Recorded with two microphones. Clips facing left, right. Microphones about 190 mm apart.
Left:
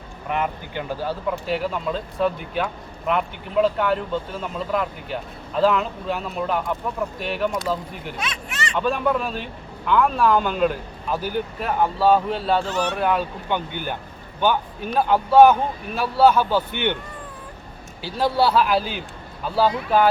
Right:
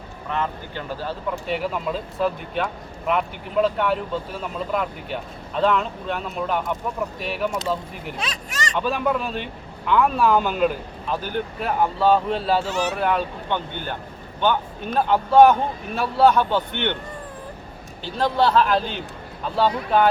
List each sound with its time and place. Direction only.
0.3 s a man's voice: 15° left (ahead or behind)
1.5 s speech: centre (ahead or behind)
8.2 s speech: 35° right (ahead or behind)
8.7 s speech: centre (ahead or behind)
14.9 s speech: 5° left (ahead or behind)
18.0 s a man's voice: 10° left (ahead or behind)